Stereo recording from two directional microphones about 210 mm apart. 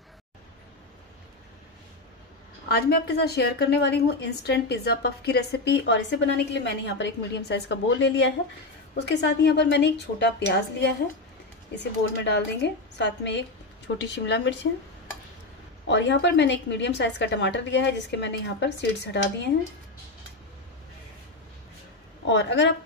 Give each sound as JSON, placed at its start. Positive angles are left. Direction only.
{"t": 2.7, "sound": "a woman's voice", "side_deg": 50}
{"t": 15.9, "sound": "a woman's voice", "side_deg": 55}
{"t": 22.3, "sound": "a woman's voice", "side_deg": 60}